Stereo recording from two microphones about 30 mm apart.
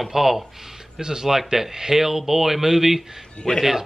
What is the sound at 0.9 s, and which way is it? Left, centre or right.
Speech, centre.